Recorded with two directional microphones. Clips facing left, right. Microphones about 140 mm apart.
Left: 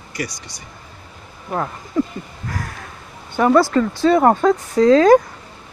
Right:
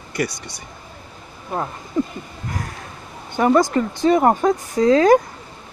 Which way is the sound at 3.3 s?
20° right (ahead or behind).